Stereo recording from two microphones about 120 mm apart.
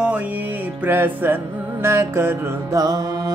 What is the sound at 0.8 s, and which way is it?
Music, 15° right (ahead or behind).